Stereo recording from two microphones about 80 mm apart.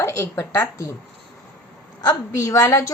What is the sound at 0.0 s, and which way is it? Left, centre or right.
Speech, left.